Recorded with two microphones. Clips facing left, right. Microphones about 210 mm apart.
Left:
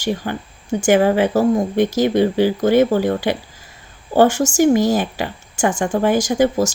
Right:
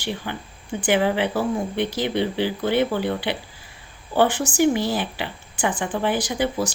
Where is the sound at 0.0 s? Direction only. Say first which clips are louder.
Left 7 dB; 45° left (ahead or behind).